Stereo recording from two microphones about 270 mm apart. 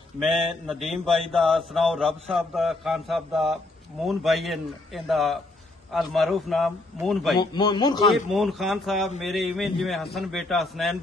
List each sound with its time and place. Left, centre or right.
0.2 s a man's voice: centre
7.5 s speech: centre
8.3 s a man's voice: centre